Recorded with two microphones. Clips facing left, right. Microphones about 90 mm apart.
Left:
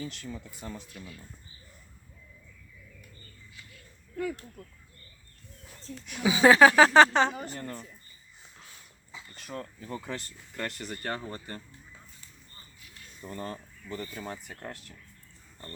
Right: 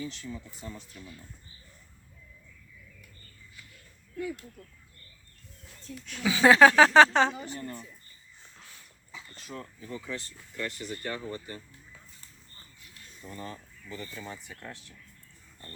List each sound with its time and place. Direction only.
0.0 s speech: 55° left (ahead or behind)
6.1 s speech: 15° left (ahead or behind)
6.4 s speech: 5° left (ahead or behind)
7.3 s a woman's voice: 40° left (ahead or behind)
8.5 s dog: 5° left (ahead or behind)
9.3 s speech: 55° left (ahead or behind)
13.3 s speech: 45° left (ahead or behind)